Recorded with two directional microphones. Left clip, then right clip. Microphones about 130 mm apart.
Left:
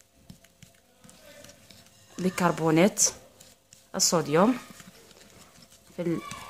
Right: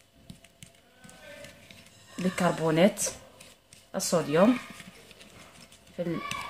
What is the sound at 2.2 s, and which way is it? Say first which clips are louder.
Speech: left 2 dB; 60° left (ahead or behind).